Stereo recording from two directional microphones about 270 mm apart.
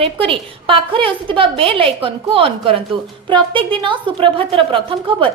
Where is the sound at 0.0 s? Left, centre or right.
Centre.